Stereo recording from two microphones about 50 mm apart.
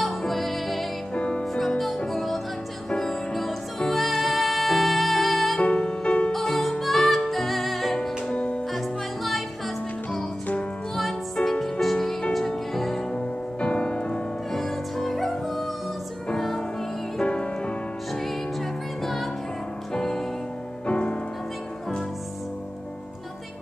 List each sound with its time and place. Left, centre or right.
0.0 s music: centre
1.1 s music: left
1.4 s music: centre
5.6 s music: left
6.3 s music: centre
8.3 s music: left
8.7 s music: centre
11.0 s music: centre
13.1 s music: left
14.5 s music: centre
17.2 s music: left
18.1 s music: centre
20.8 s music: left